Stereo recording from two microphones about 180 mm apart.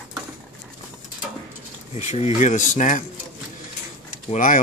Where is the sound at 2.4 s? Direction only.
40° left (ahead or behind).